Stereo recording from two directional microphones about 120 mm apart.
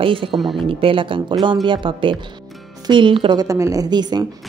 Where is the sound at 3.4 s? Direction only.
25° right (ahead or behind).